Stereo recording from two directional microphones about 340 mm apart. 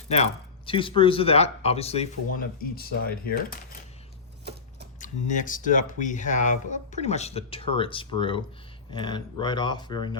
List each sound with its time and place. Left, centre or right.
0.1 s speech: centre
4.9 s speech: left